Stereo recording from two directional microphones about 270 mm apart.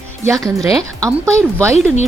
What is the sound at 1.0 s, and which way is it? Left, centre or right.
Speech, centre.